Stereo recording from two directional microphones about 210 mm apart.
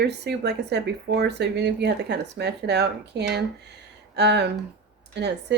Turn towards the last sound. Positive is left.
turn(degrees=-55)  # may be behind; listen again after turning